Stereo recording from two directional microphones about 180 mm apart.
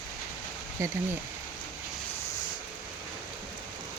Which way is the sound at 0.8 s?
15° right (ahead or behind).